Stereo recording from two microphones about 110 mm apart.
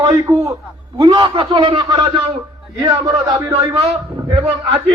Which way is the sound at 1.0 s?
40° right (ahead or behind).